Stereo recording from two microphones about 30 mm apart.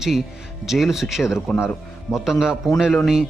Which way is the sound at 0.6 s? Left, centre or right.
Centre.